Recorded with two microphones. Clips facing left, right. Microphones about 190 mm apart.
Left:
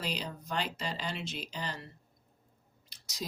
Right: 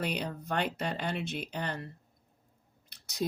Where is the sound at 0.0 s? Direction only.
60° right (ahead or behind).